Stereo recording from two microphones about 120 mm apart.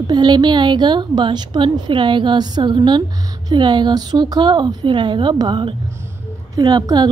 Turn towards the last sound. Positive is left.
turn(degrees=-35)  # may be behind; listen again after turning